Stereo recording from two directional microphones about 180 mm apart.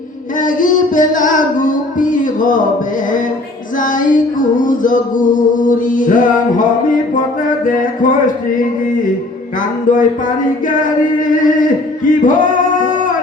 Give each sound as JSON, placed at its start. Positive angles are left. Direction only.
{"t": 0.3, "sound": "music", "side_deg": 45}
{"t": 3.8, "sound": "music", "side_deg": 50}
{"t": 7.6, "sound": "music", "side_deg": 50}
{"t": 9.9, "sound": "music", "side_deg": 45}